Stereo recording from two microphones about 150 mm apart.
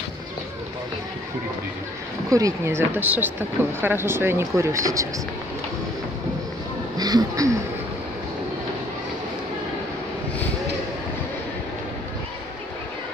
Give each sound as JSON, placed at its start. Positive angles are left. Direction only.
{"t": 2.2, "sound": "speech", "side_deg": -20}
{"t": 7.0, "sound": "speech", "side_deg": -25}